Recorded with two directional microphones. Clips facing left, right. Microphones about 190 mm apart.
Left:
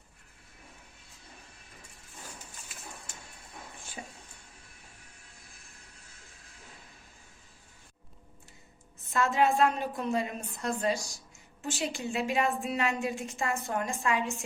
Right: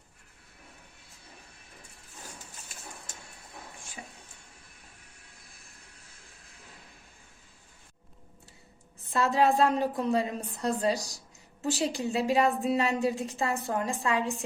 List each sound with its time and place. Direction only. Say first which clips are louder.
9.1 s a woman's voice: right 2 dB; 35° right (ahead or behind)